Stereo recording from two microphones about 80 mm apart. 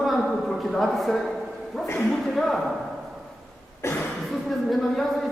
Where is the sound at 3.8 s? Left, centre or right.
Left.